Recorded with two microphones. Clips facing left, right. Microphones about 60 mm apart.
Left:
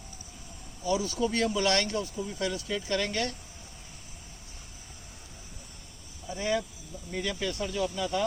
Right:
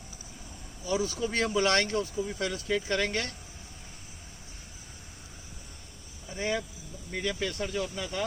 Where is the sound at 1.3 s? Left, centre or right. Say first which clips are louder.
Right 2 dB; right.